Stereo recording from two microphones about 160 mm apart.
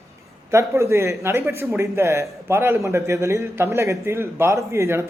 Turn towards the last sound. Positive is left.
turn(degrees=-15)  # may be behind; listen again after turning